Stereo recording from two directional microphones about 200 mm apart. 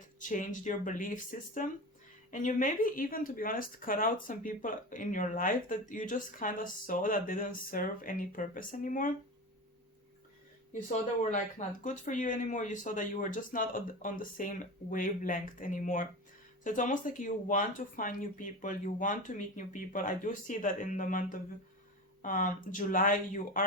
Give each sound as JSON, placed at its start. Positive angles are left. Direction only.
{"t": 0.2, "sound": "speech", "side_deg": 40}
{"t": 11.8, "sound": "speech", "side_deg": 40}